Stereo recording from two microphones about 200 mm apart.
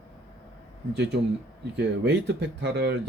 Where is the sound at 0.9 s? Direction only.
60° right (ahead or behind).